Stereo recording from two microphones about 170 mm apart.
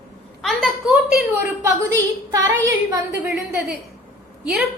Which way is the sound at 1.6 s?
20° right (ahead or behind).